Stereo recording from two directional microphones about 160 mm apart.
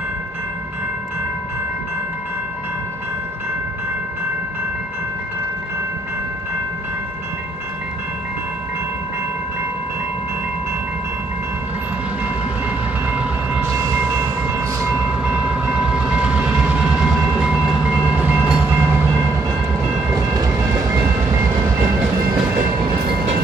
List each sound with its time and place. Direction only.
12.6 s train: 10° right (ahead or behind)